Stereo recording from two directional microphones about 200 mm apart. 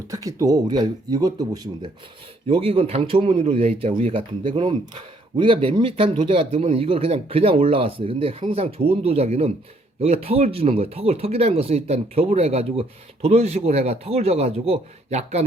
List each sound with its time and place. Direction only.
0.1 s speech: 15° right (ahead or behind); by 15.4 s 30° right (ahead or behind)